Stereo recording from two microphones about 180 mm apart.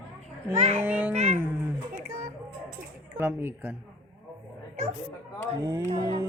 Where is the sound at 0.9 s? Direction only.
10° right (ahead or behind).